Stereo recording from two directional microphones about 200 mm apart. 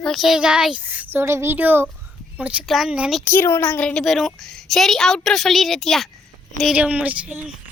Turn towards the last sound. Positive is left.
turn(degrees=-5)  # may be behind; listen again after turning